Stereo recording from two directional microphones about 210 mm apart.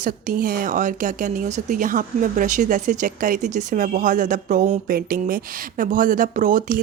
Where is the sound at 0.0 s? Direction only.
40° right (ahead or behind).